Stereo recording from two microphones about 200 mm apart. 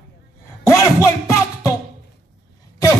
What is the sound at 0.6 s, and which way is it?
Music, 15° left (ahead or behind).